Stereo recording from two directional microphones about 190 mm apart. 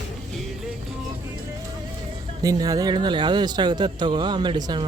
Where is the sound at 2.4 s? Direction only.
20° right (ahead or behind).